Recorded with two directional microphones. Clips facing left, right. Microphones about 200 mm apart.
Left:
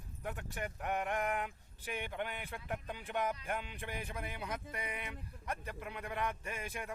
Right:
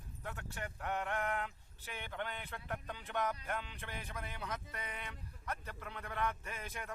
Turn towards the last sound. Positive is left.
turn(degrees=10)  # may be behind; listen again after turning